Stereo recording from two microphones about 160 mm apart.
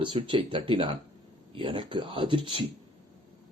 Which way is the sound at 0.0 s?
30° right (ahead or behind).